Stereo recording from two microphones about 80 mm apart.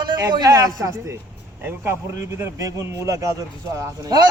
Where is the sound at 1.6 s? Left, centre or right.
Right.